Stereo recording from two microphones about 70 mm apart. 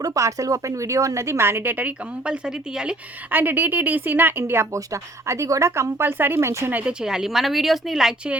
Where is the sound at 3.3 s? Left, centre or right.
Right.